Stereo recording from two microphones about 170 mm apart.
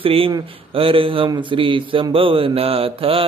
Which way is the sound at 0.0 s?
35° right (ahead or behind).